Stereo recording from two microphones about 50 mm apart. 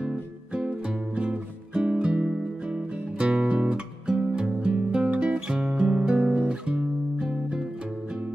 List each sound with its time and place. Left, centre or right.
0.0 s music: centre
6.1 s guitar: right